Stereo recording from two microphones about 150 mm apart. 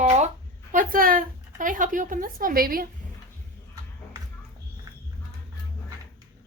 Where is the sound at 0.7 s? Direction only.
65° right (ahead or behind).